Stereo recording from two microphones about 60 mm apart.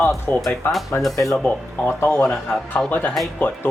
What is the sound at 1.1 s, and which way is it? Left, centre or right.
Speech, left.